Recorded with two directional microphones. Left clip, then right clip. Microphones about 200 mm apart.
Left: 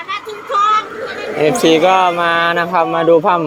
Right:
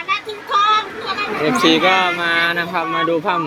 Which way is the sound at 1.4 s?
40° left (ahead or behind).